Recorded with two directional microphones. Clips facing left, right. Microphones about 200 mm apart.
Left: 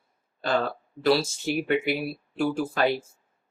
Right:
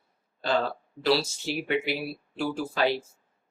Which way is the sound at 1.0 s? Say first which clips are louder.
Left 3 dB; 50° left (ahead or behind).